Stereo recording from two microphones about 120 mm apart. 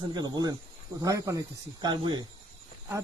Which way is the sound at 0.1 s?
35° right (ahead or behind).